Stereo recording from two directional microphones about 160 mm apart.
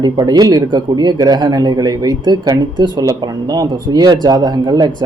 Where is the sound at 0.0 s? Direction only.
25° right (ahead or behind).